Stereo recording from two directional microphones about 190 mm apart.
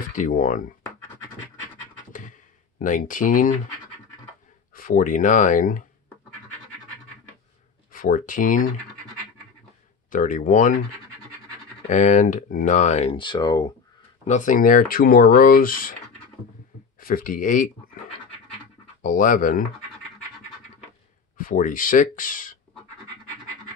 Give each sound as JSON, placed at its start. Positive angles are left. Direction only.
{"t": 0.1, "sound": "speech", "side_deg": 45}
{"t": 2.8, "sound": "speech", "side_deg": 45}
{"t": 4.7, "sound": "speech", "side_deg": 45}
{"t": 7.9, "sound": "speech", "side_deg": 45}
{"t": 10.0, "sound": "speech", "side_deg": 45}
{"t": 11.9, "sound": "speech", "side_deg": 40}
{"t": 14.2, "sound": "speech", "side_deg": 40}
{"t": 17.0, "sound": "speech", "side_deg": 50}
{"t": 19.0, "sound": "speech", "side_deg": 45}
{"t": 21.4, "sound": "speech", "side_deg": 45}